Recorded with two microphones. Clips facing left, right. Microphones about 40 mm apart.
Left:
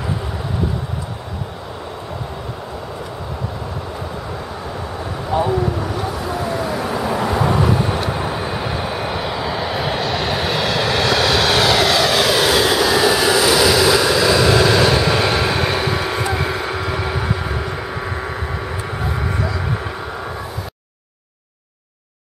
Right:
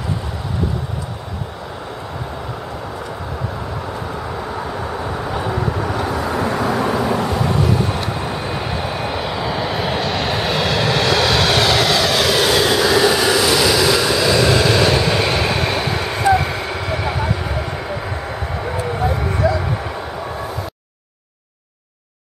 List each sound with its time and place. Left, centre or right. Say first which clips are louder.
5.5 s a sound: left 1 dB; centre
5.9 s vehicle: right 3 dB; right; by 17.6 s centre
19.0 s vehicle: even; centre